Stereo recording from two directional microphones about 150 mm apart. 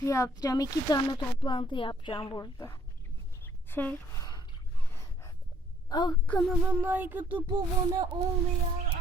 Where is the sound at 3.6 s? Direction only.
15° left (ahead or behind).